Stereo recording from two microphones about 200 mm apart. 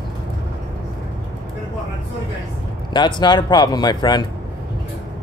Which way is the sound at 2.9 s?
20° left (ahead or behind).